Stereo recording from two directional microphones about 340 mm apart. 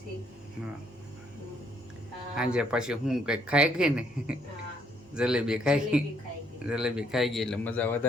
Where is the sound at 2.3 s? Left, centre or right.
Centre.